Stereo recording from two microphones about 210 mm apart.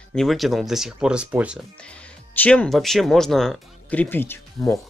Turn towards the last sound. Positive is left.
turn(degrees=5)  # may be behind; listen again after turning